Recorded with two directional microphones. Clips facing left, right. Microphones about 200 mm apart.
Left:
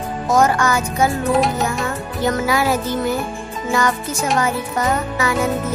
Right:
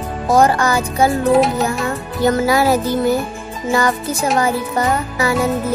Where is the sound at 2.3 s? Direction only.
35° right (ahead or behind).